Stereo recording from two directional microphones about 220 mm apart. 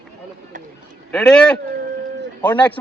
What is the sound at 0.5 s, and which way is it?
Speech, 35° right (ahead or behind).